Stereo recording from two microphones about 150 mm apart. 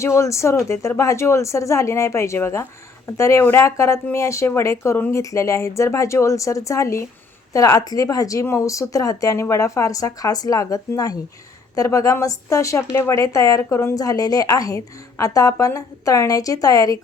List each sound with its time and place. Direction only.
0.0 s a woman's voice: 20° left (ahead or behind)